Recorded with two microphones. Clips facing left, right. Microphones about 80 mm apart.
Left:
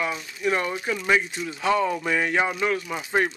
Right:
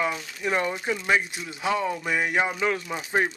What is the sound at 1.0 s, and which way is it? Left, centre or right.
Speech, centre.